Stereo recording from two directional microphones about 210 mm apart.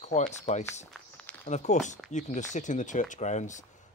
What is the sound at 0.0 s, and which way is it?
Speech, 35° left (ahead or behind).